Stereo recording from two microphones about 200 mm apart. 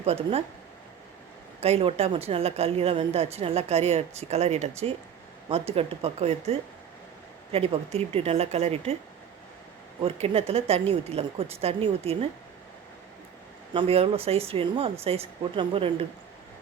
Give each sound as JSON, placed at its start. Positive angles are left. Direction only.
{"t": 0.0, "sound": "speech", "side_deg": -30}
{"t": 1.6, "sound": "a woman's voice", "side_deg": -30}
{"t": 10.0, "sound": "a woman's voice", "side_deg": -30}
{"t": 13.7, "sound": "a woman's voice", "side_deg": -30}